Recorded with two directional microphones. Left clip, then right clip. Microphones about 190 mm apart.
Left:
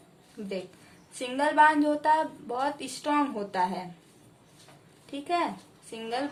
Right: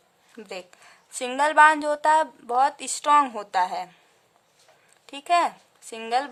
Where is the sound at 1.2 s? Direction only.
45° right (ahead or behind).